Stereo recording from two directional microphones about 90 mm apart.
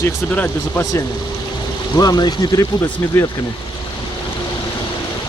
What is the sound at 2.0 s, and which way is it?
Speech, 45° left (ahead or behind).